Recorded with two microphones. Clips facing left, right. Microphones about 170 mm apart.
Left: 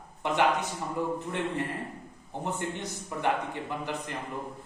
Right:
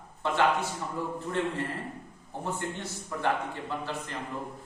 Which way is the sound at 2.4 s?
15° left (ahead or behind).